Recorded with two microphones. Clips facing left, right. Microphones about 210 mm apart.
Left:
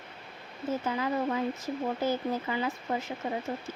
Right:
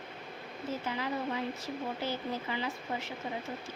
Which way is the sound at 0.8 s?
45° left (ahead or behind).